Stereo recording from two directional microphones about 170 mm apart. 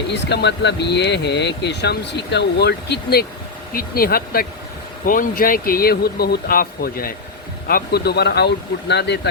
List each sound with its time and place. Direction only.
0.1 s speech: 90° left